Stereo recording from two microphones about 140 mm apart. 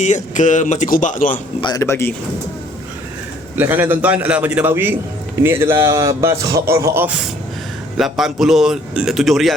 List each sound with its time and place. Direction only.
0.0 s speech: 65° left (ahead or behind)
1.6 s speech: 25° left (ahead or behind)
3.5 s a man's voice: 15° right (ahead or behind)
7.9 s a man's voice: centre (ahead or behind)